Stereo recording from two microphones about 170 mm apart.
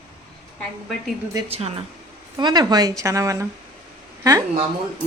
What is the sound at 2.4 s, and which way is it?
A woman's voice, 25° right (ahead or behind).